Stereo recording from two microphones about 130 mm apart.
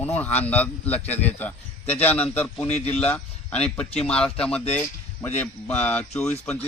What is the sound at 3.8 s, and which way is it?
Speech, 50° left (ahead or behind).